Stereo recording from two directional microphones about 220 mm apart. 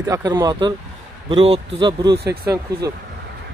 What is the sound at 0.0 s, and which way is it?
Speech, 15° right (ahead or behind).